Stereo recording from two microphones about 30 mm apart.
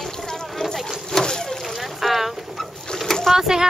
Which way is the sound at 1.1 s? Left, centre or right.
Left.